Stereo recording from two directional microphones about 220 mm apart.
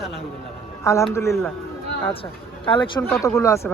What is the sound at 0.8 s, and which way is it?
Speech, 15° left (ahead or behind).